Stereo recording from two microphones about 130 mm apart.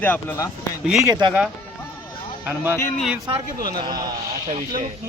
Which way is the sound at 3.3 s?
40° right (ahead or behind).